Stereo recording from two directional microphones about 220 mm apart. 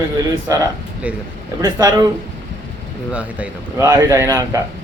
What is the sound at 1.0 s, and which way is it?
Speech, 5° right (ahead or behind).